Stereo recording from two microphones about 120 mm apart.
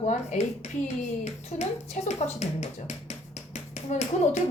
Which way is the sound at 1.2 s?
70° left (ahead or behind).